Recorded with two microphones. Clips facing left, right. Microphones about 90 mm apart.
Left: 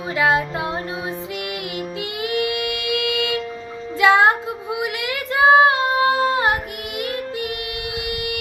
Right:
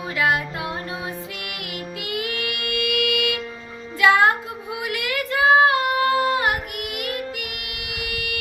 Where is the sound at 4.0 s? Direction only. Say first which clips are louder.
Left 2 dB; 25° left (ahead or behind).